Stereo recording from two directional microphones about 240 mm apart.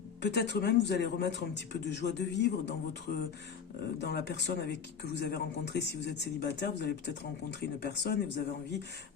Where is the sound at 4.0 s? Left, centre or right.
Left.